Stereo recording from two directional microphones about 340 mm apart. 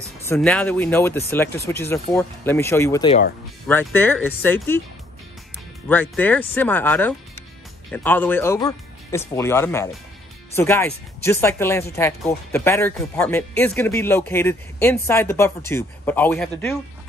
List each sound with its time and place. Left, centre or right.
0.3 s speech: centre
5.9 s speech: centre